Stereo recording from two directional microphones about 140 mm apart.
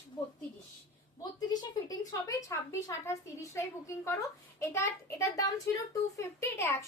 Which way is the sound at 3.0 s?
20° left (ahead or behind).